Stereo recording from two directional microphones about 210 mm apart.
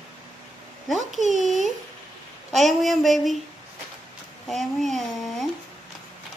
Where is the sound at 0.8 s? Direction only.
Centre (ahead or behind).